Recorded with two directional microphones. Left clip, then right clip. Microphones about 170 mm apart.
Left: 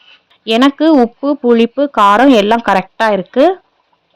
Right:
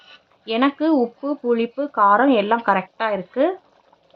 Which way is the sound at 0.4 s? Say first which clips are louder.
Left 9 dB; 45° left (ahead or behind).